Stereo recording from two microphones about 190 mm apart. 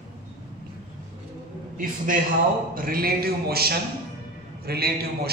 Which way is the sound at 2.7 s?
50° right (ahead or behind).